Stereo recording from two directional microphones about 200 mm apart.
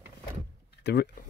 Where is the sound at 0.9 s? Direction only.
60° left (ahead or behind).